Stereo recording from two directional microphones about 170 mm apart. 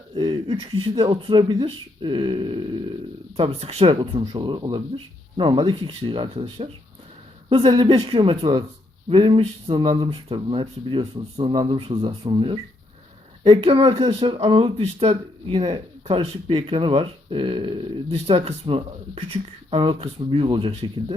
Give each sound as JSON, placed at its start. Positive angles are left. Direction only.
{"t": 0.2, "sound": "speech", "side_deg": -25}